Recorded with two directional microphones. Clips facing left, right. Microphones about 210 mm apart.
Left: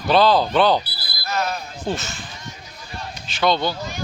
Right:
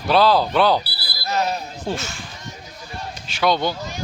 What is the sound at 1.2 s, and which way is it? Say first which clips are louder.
Speech: right 2 dB; 35° right (ahead or behind).